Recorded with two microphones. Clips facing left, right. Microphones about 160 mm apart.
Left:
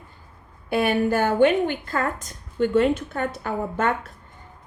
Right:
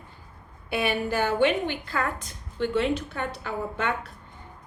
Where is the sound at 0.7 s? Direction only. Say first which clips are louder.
Left 6 dB; 50° left (ahead or behind).